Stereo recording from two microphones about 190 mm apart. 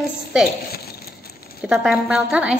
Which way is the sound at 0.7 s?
55° left (ahead or behind).